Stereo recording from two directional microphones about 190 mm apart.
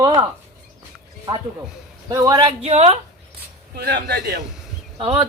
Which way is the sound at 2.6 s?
35° right (ahead or behind).